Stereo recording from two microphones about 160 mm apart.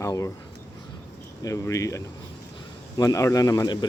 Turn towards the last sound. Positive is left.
turn(degrees=20)  # may be behind; listen again after turning